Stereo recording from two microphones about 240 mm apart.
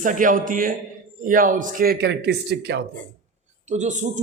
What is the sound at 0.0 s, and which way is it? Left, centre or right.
A man's voice, right.